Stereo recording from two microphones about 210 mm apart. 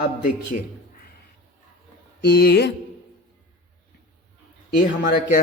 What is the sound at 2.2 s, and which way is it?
Speech, 45° left (ahead or behind).